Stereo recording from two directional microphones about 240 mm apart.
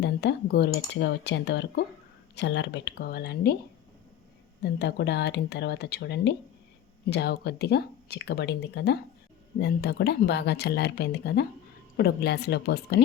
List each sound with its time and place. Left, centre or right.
0.0 s speech: left
4.6 s speech: left